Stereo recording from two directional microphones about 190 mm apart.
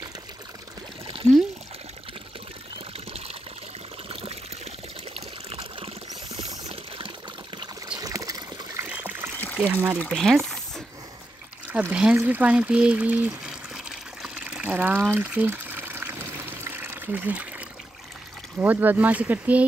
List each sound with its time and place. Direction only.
4.1 s water: 30° right (ahead or behind)
5.1 s pour: 30° right (ahead or behind)
8.0 s water: 15° right (ahead or behind)
8.8 s trickle: 10° right (ahead or behind)
9.6 s speech: 10° right (ahead or behind)
9.9 s speech: 5° left (ahead or behind)
11.7 s speech: 5° right (ahead or behind)
13.7 s water: centre (ahead or behind)
18.6 s speech: 10° right (ahead or behind)